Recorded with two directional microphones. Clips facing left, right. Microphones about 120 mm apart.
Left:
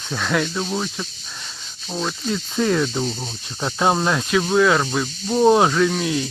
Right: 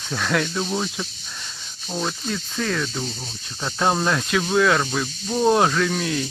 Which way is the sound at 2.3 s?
20° left (ahead or behind).